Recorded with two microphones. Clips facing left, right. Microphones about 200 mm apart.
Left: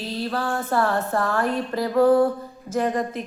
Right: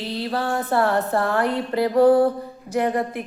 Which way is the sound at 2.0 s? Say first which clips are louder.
Right 2 dB; 35° right (ahead or behind).